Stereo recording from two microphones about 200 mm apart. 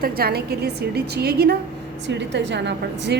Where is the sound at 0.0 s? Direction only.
50° right (ahead or behind).